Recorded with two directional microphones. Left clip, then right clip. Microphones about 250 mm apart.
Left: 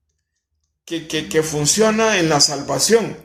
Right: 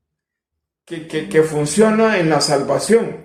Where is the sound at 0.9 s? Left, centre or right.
Left.